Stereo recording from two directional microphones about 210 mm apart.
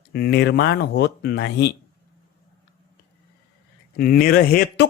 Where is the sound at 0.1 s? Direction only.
50° left (ahead or behind).